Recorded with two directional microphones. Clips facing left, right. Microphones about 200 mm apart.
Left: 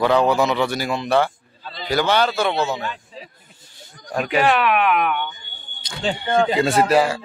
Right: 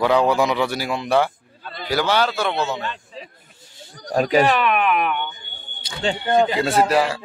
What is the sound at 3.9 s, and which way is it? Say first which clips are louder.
Speech: right 4 dB; 40° right (ahead or behind).